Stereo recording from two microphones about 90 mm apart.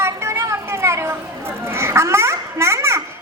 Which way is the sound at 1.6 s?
30° right (ahead or behind).